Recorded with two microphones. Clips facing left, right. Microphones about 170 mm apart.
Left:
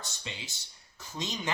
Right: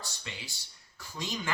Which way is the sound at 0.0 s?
20° left (ahead or behind).